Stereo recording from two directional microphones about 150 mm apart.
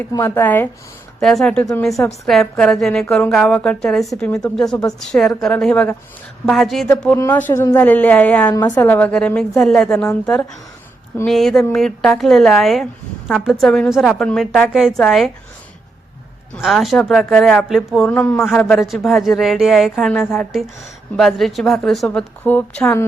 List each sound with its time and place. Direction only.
0.1 s a woman's voice: 15° left (ahead or behind); by 6.8 s centre (ahead or behind)
6.8 s a woman's voice: 10° left (ahead or behind)
8.4 s a woman's voice: 25° left (ahead or behind)
8.7 s a woman's voice: 15° left (ahead or behind)
11.3 s speech: centre (ahead or behind)
16.6 s speech: centre (ahead or behind)
18.3 s a woman's voice: 15° left (ahead or behind)
18.5 s speech: 5° left (ahead or behind)